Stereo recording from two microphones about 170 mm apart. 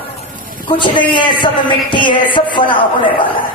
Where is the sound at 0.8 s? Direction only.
25° left (ahead or behind).